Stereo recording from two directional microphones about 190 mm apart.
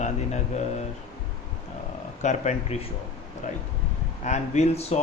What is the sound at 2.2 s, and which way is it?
A man's voice, 40° left (ahead or behind).